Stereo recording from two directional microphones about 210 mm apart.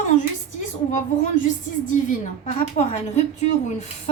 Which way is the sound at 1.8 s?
35° left (ahead or behind).